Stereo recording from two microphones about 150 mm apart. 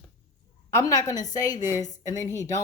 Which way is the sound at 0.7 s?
20° left (ahead or behind).